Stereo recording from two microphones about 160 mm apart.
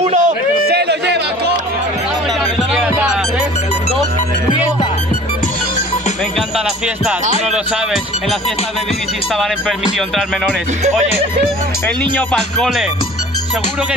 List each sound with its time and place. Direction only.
0.0 s a sound: 50° right (ahead or behind)
0.7 s chatter: 90° right
2.7 s music: 5° right (ahead or behind)
7.5 s speech: centre (ahead or behind)
9.4 s speech: centre (ahead or behind)
12.0 s speech: 5° left (ahead or behind)